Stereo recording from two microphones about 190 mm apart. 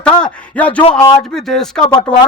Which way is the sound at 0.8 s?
30° left (ahead or behind).